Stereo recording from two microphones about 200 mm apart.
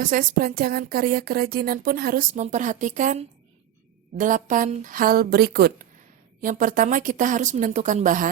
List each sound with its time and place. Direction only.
0.0 s a woman's voice: 45° right (ahead or behind)